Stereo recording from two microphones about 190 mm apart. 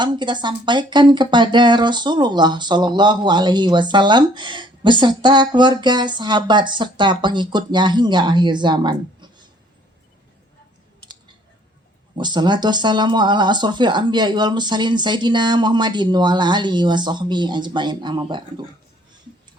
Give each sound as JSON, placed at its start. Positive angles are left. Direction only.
{"t": 0.0, "sound": "speech", "side_deg": -25}
{"t": 12.1, "sound": "speech", "side_deg": -25}